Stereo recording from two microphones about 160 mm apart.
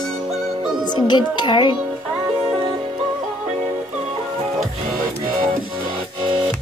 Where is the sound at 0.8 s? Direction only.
30° left (ahead or behind).